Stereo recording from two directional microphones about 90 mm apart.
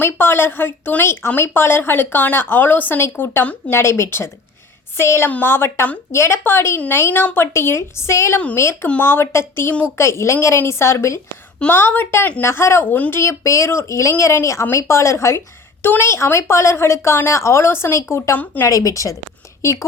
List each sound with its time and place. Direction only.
0.0 s a woman's voice: 25° left (ahead or behind)
18.7 s speech: 40° left (ahead or behind)